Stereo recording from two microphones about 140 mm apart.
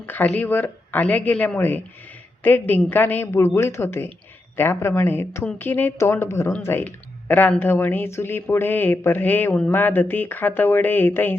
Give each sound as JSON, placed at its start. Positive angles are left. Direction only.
{"t": 0.0, "sound": "a woman's voice", "side_deg": 10}